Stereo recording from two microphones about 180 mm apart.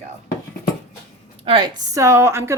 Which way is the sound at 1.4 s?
25° right (ahead or behind).